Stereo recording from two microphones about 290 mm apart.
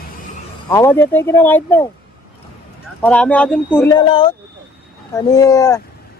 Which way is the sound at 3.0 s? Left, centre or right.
Centre.